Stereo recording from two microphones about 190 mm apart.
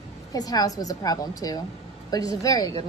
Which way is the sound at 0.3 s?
20° left (ahead or behind).